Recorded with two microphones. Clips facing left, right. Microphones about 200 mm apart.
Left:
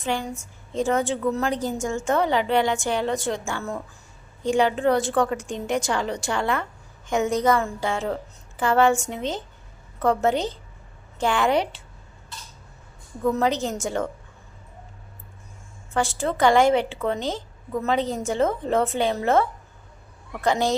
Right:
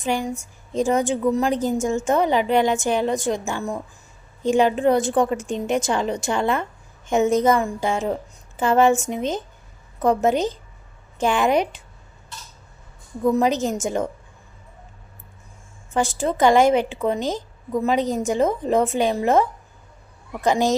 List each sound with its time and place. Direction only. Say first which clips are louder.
0.0 s a woman's voice: right 3 dB; 15° right (ahead or behind)
13.2 s a woman's voice: right 3 dB; 15° right (ahead or behind)
15.9 s a woman's voice: right 2 dB; 20° right (ahead or behind)